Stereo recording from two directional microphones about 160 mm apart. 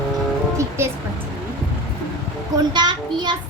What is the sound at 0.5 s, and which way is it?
Music, 15° right (ahead or behind).